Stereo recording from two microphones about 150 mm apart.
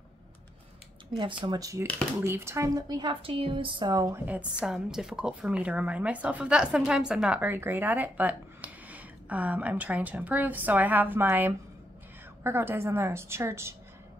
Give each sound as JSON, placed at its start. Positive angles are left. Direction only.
{"t": 1.1, "sound": "a woman's voice", "side_deg": -30}
{"t": 4.6, "sound": "speech", "side_deg": -5}